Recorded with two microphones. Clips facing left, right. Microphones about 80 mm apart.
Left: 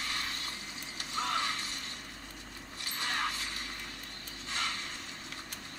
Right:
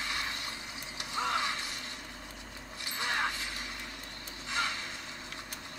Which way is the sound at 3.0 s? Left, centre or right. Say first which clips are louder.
Right 2 dB; centre.